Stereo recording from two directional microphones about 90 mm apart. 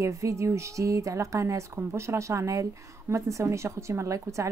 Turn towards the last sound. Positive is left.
turn(degrees=-35)  # may be behind; listen again after turning